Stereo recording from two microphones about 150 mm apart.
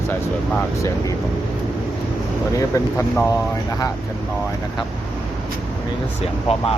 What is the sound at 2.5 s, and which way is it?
Speech, 15° left (ahead or behind).